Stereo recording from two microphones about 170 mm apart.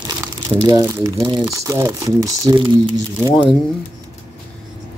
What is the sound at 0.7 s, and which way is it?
Speech, 20° right (ahead or behind).